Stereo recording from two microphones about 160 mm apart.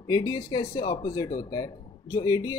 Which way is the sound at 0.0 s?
25° left (ahead or behind).